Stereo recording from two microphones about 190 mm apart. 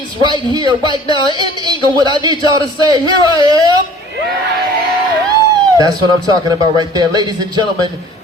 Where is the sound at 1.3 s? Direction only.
20° right (ahead or behind).